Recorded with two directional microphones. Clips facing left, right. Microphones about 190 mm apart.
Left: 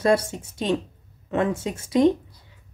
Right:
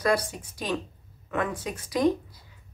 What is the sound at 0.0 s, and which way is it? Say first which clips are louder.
A woman's voice: left 5 dB; 25° left (ahead or behind).